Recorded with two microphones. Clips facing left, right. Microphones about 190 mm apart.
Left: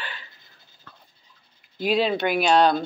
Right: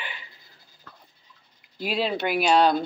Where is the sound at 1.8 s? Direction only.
5° right (ahead or behind).